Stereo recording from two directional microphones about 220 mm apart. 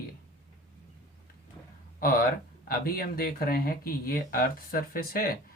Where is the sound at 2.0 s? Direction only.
40° left (ahead or behind).